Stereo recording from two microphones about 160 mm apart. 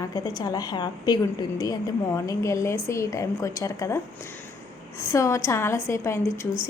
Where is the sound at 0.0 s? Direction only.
25° left (ahead or behind).